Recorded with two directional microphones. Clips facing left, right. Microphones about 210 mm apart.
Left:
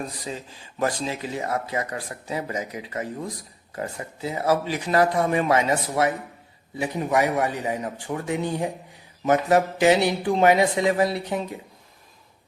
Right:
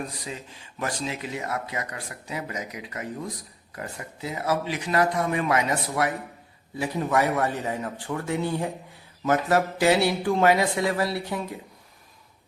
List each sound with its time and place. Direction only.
0.8 s a man's voice: 35° left (ahead or behind)